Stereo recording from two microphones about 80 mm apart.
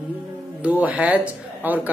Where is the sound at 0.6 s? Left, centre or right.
Centre.